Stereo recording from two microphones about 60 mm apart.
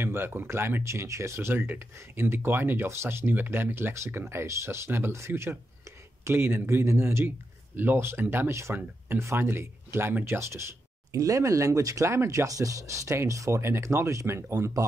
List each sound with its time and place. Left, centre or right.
0.0 s speech: right
1.3 s a man's voice: right
11.1 s speech: right
13.3 s speech: right
13.6 s speech: right